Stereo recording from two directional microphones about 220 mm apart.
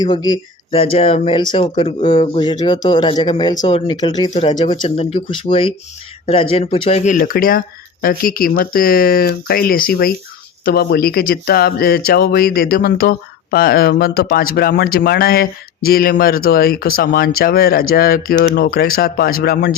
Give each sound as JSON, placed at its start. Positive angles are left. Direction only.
{"t": 0.0, "sound": "speech", "side_deg": 20}